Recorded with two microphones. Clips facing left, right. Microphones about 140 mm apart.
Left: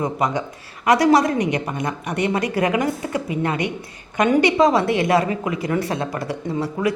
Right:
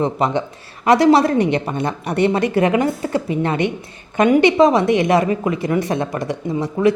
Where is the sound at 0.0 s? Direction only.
25° right (ahead or behind).